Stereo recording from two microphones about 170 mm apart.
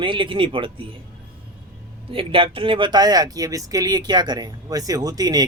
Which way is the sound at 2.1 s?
30° right (ahead or behind).